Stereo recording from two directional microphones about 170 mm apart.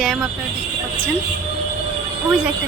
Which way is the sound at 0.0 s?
Centre (ahead or behind).